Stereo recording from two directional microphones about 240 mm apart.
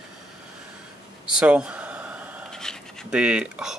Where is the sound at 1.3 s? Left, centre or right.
Centre.